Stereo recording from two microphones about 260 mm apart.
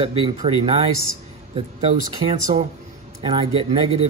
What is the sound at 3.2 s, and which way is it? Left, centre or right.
Speech, right.